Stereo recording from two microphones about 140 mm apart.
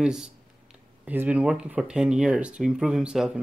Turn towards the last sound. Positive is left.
turn(degrees=-5)  # may be behind; listen again after turning